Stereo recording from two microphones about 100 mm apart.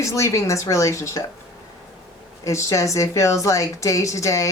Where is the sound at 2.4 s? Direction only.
30° left (ahead or behind).